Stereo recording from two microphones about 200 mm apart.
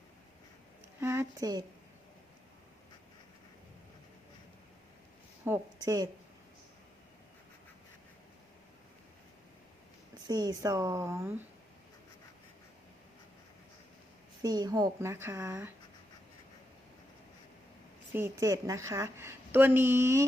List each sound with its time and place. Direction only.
0.9 s speech: 15° right (ahead or behind)
5.5 s speech: 20° right (ahead or behind)
10.2 s a woman's voice: 20° right (ahead or behind)
14.4 s a woman's voice: 20° right (ahead or behind)
18.1 s a woman's voice: 15° right (ahead or behind)